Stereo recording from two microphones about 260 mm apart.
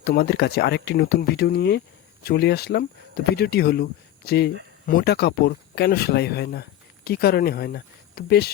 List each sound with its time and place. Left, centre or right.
0.0 s speech: left